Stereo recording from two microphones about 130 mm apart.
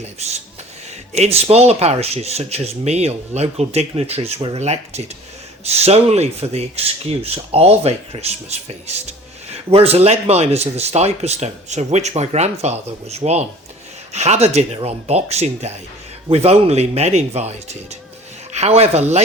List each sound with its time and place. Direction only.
1.1 s speech: 55° right (ahead or behind)